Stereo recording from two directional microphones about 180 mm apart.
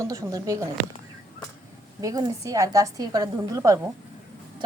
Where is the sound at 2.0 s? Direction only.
20° right (ahead or behind).